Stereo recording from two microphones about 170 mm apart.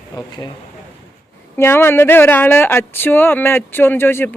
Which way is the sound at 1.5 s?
15° left (ahead or behind).